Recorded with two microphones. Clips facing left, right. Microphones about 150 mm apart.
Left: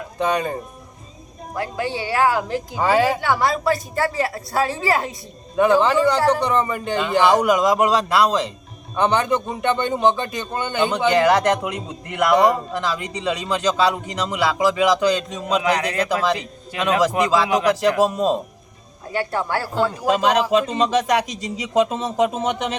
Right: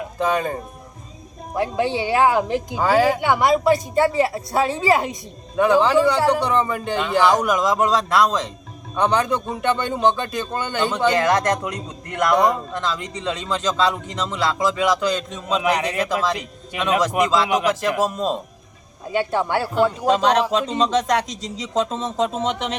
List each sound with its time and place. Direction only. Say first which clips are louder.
0.2 s speech: even; centre (ahead or behind)
1.5 s a woman's voice: right 4 dB; 25° right (ahead or behind)
2.7 s speech: even; centre (ahead or behind)
3.2 s a woman's voice: right 3 dB; 20° right (ahead or behind)
5.8 s a man's voice: even; centre (ahead or behind)
15.7 s a man's voice: left 1 dB; 5° right (ahead or behind)
17.0 s a man's voice: left 2 dB; 10° left (ahead or behind)
19.1 s a woman's voice: right 2 dB; 20° right (ahead or behind)
20.1 s a man's voice: left 3 dB; 10° left (ahead or behind)